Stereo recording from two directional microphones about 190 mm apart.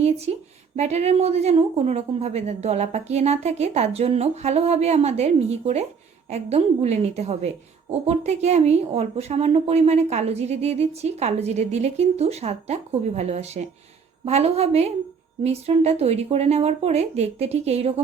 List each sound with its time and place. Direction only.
0.3 s a woman's voice: 35° right (ahead or behind)